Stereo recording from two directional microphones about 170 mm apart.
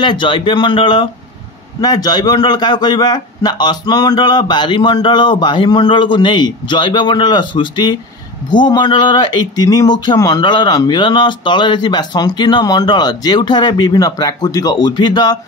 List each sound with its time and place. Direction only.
0.0 s speech: 25° left (ahead or behind)